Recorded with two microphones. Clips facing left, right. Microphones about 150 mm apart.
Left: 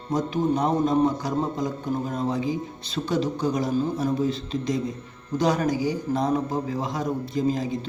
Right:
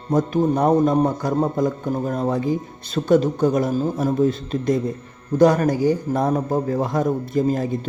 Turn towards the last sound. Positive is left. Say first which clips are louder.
# right 4 dB
turn(degrees=-55)  # may be behind; listen again after turning